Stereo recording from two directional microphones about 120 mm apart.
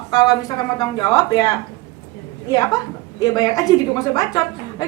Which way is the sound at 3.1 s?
30° left (ahead or behind).